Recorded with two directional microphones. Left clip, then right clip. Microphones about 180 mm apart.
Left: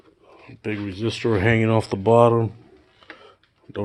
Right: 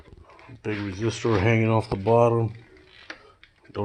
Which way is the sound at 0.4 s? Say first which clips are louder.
Left 2 dB; 40° left (ahead or behind).